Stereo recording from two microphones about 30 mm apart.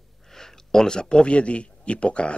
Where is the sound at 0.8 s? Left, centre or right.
Left.